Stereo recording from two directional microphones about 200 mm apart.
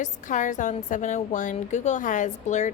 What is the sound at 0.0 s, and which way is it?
A woman's voice, 40° left (ahead or behind).